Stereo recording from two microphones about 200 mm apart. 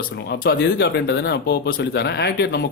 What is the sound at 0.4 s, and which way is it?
A man's voice, 55° left (ahead or behind).